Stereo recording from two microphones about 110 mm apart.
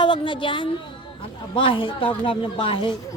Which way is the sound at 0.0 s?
45° left (ahead or behind).